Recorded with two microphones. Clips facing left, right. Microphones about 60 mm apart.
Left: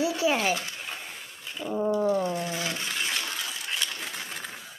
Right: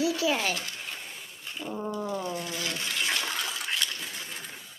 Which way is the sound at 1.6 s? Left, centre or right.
Centre.